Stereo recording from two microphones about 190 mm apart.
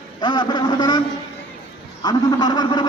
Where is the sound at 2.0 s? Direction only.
20° left (ahead or behind).